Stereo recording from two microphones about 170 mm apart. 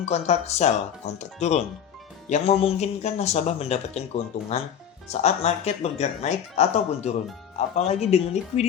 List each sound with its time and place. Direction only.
0.0 s speech: 40° left (ahead or behind)